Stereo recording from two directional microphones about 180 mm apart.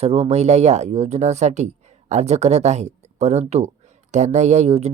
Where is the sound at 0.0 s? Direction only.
35° right (ahead or behind).